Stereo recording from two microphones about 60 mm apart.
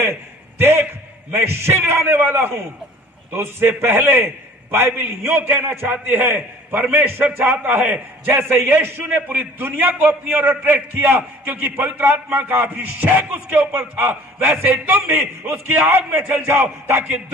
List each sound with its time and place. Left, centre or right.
0.6 s a sound: right
1.3 s a man's voice: right
2.1 s a man's voice: right